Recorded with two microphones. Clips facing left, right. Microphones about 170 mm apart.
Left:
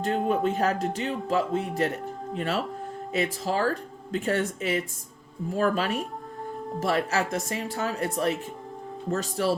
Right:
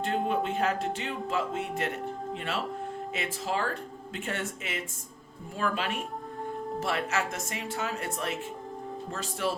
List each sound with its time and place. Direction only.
0.0 s speech: 40° left (ahead or behind)